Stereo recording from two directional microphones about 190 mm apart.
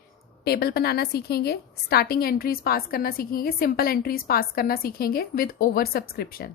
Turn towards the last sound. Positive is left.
turn(degrees=50)  # may be behind; listen again after turning